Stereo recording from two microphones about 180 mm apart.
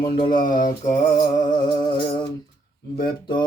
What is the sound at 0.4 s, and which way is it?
Mantra, 25° left (ahead or behind).